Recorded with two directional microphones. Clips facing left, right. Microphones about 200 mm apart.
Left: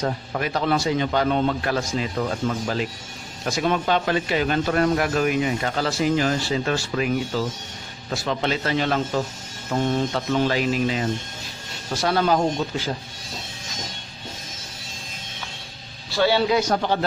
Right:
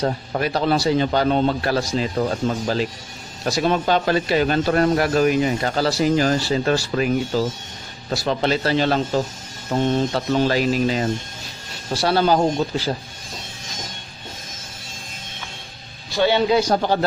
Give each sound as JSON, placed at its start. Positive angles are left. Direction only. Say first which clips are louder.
{"t": 0.0, "sound": "a man's voice", "louder": "right 3 dB", "side_deg": -35}
{"t": 16.1, "sound": "a man's voice", "louder": "right 2 dB", "side_deg": -20}